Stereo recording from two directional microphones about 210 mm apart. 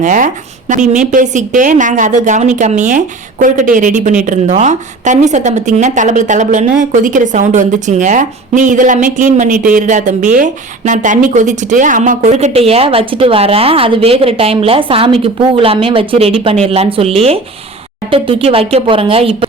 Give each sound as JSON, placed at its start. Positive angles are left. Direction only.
{"t": 0.0, "sound": "a woman's voice", "side_deg": -40}